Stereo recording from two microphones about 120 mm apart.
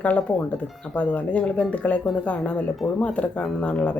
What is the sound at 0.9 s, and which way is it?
Speech, 10° left (ahead or behind).